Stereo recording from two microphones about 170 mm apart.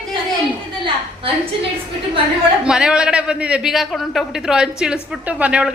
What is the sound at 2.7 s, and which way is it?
A man's voice, 5° right (ahead or behind).